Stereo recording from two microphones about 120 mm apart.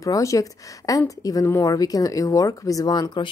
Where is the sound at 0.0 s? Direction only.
25° left (ahead or behind).